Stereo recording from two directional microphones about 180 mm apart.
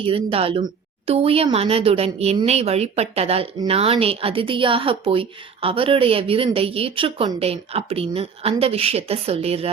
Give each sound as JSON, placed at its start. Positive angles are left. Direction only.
{"t": 0.0, "sound": "a woman's voice", "side_deg": -30}